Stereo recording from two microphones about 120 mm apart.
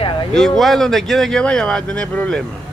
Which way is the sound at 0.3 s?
5° left (ahead or behind).